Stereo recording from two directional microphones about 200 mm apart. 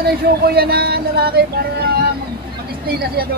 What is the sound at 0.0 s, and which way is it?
Speech, 50° right (ahead or behind).